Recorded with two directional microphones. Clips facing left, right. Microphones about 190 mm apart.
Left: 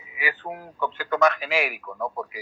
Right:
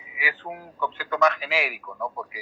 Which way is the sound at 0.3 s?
45° left (ahead or behind).